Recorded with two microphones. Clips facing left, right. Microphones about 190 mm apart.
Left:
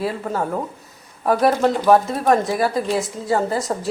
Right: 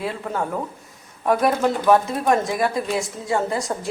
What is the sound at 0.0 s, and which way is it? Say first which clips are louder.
A woman's voice: left 3 dB; 5° left (ahead or behind).